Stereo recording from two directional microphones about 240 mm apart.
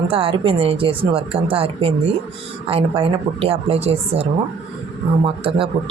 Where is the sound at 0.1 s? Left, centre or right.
Right.